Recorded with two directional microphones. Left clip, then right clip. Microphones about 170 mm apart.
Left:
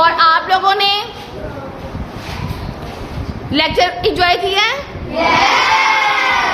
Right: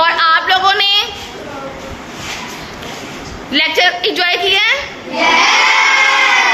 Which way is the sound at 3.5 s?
15° left (ahead or behind).